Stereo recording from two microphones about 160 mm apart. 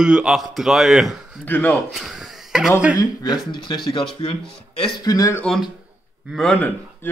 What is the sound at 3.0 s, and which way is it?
A man's voice, 25° left (ahead or behind).